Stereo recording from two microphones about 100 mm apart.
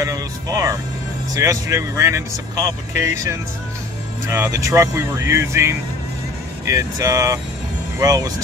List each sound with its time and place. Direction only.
0.0 s speech: 35° right (ahead or behind)